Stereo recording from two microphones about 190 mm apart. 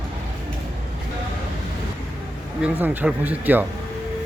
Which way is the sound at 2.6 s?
10° right (ahead or behind).